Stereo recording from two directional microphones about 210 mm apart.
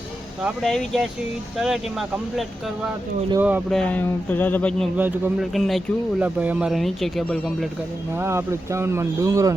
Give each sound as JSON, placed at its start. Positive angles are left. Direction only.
{"t": 0.4, "sound": "speech", "side_deg": 0}
{"t": 3.4, "sound": "speech", "side_deg": 0}
{"t": 4.9, "sound": "speech", "side_deg": -10}
{"t": 8.1, "sound": "speech", "side_deg": -10}